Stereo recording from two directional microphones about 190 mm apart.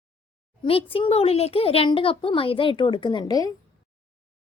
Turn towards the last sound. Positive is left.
turn(degrees=20)  # may be behind; listen again after turning